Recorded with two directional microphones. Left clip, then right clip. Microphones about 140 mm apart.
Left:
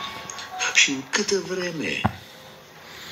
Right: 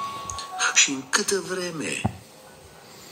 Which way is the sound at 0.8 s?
Centre (ahead or behind).